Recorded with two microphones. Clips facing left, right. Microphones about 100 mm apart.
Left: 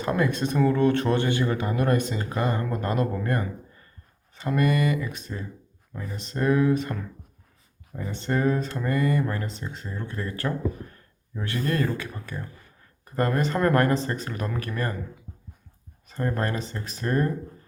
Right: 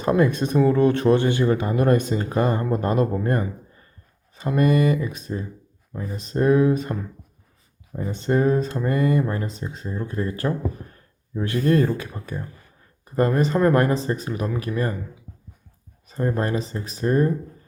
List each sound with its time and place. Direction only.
0.0 s a sound: 25° right (ahead or behind)
0.3 s speech: 20° right (ahead or behind)
1.4 s speech: 30° right (ahead or behind)
4.6 s speech: 35° right (ahead or behind)
5.3 s speech: 20° right (ahead or behind)
7.9 s speech: 20° right (ahead or behind)
9.5 s speech: 10° right (ahead or behind)
16.1 s speech: 15° right (ahead or behind)